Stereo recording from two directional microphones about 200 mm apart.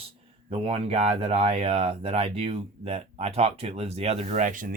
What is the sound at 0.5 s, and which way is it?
Speech, 30° right (ahead or behind).